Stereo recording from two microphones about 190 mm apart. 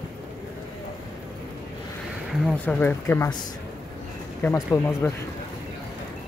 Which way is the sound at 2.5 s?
10° left (ahead or behind).